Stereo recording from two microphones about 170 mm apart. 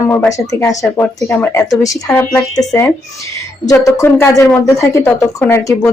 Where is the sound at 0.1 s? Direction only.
15° left (ahead or behind).